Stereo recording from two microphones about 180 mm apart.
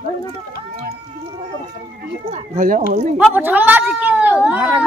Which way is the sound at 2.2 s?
35° right (ahead or behind).